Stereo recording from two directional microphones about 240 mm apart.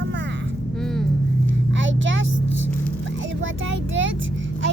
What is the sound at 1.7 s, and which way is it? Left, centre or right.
Vehicle, right.